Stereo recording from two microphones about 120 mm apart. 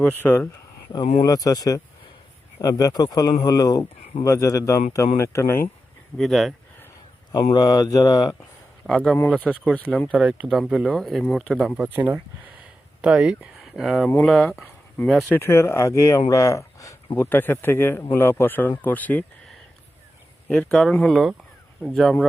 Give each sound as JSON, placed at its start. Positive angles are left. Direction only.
{"t": 0.2, "sound": "speech", "side_deg": 15}
{"t": 1.2, "sound": "speech", "side_deg": 30}
{"t": 6.1, "sound": "speech", "side_deg": 0}
{"t": 7.5, "sound": "speech", "side_deg": 30}
{"t": 8.9, "sound": "speech", "side_deg": 5}
{"t": 10.1, "sound": "speech", "side_deg": -10}
{"t": 11.8, "sound": "speech", "side_deg": -15}
{"t": 15.3, "sound": "speech", "side_deg": 20}
{"t": 20.5, "sound": "speech", "side_deg": 10}